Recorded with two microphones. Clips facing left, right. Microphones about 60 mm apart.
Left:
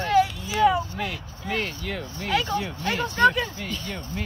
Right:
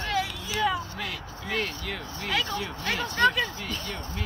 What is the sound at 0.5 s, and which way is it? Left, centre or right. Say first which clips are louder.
Speech: left 7 dB; centre.